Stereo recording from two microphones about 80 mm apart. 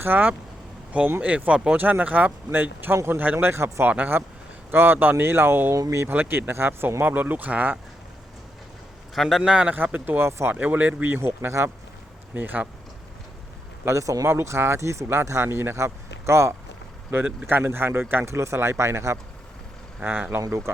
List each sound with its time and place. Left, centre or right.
0.0 s speech: right
3.8 s speech: centre
5.7 s speech: right
6.1 s speech: right
9.1 s speech: centre
9.7 s speech: right
10.5 s speech: centre
12.3 s speech: right
13.8 s speech: right
14.3 s speech: right